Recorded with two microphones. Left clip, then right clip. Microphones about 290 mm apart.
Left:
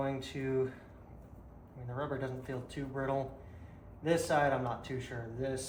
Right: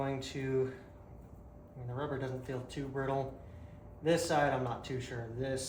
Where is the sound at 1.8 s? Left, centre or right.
Centre.